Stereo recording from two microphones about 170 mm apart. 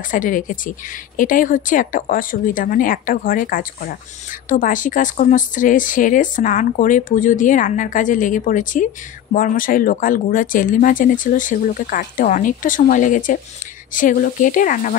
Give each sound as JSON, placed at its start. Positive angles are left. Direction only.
{"t": 0.1, "sound": "speech", "side_deg": 50}